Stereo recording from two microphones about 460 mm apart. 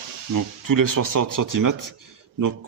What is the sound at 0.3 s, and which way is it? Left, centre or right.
Speech, right.